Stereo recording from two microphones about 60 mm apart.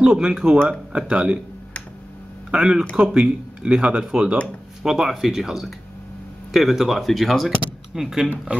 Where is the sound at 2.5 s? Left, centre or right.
Centre.